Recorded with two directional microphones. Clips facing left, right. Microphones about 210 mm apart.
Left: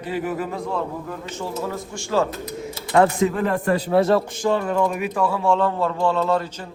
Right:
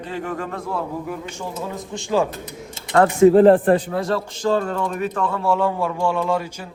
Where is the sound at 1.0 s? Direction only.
15° right (ahead or behind).